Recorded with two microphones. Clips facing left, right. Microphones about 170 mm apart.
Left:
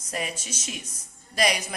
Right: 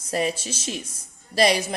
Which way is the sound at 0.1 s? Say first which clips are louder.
Right 8 dB; 30° right (ahead or behind).